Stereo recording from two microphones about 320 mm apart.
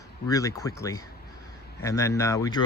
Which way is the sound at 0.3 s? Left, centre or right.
Centre.